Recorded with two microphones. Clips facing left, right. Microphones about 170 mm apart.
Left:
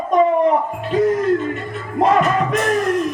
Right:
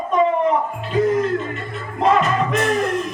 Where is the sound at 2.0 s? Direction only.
50° left (ahead or behind).